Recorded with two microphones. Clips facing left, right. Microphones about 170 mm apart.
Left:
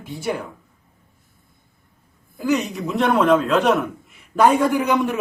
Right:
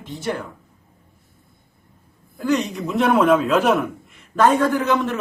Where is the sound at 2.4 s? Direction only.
5° left (ahead or behind).